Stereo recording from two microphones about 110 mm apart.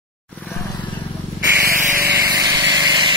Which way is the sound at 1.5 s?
20° right (ahead or behind).